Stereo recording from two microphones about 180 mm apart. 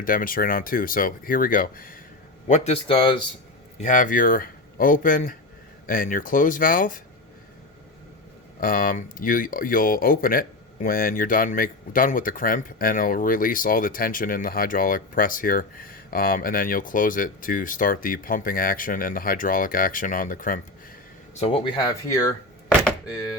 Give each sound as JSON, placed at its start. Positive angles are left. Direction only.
{"t": 0.0, "sound": "speech", "side_deg": 50}
{"t": 2.5, "sound": "speech", "side_deg": 35}
{"t": 3.8, "sound": "speech", "side_deg": 45}
{"t": 8.6, "sound": "speech", "side_deg": 50}
{"t": 21.3, "sound": "speech", "side_deg": 35}